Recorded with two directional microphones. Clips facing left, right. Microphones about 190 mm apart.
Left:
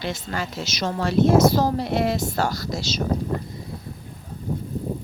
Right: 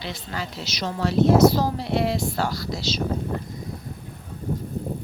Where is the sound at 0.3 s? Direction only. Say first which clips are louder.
Left 3 dB; 50° left (ahead or behind).